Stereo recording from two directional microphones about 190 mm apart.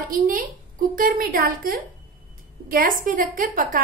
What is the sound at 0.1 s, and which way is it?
A woman's voice, 45° right (ahead or behind).